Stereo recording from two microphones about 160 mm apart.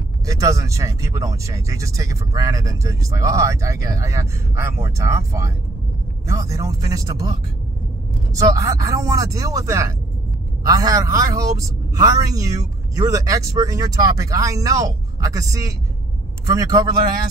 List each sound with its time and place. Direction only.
0.3 s speech: 20° right (ahead or behind)